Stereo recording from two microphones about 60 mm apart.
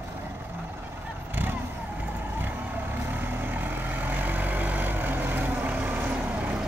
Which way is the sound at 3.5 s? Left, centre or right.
Right.